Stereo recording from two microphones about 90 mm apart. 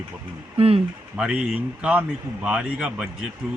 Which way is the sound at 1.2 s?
10° right (ahead or behind).